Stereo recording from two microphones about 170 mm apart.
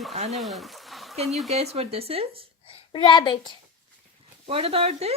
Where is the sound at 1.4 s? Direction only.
40° right (ahead or behind).